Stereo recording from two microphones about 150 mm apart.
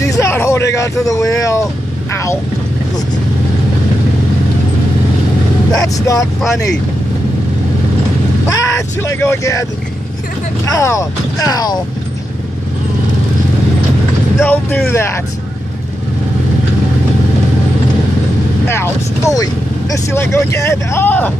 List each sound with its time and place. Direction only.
0.0 s a sound: 20° left (ahead or behind)
1.0 s speech: 20° left (ahead or behind)
5.9 s speech: 20° left (ahead or behind)
8.5 s speech: 20° left (ahead or behind)
14.4 s speech: 10° left (ahead or behind)
18.7 s speech: 20° left (ahead or behind)